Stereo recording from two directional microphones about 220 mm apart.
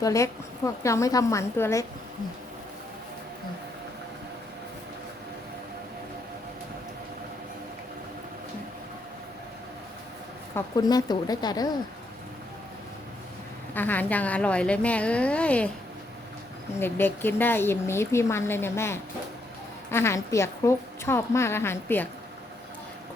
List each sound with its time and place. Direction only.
0.0 s speech: 15° left (ahead or behind)
10.5 s speech: 15° left (ahead or behind)
13.7 s a woman's voice: 10° left (ahead or behind)
16.8 s speech: 10° left (ahead or behind)